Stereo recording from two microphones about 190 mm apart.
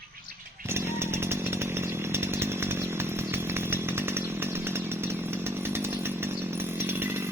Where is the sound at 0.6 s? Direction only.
15° right (ahead or behind).